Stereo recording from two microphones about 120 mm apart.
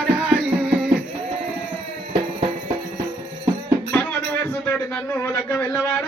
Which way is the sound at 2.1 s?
45° right (ahead or behind).